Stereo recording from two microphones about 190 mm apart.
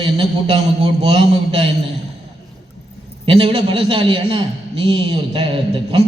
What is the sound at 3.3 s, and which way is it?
A man's voice, 30° right (ahead or behind).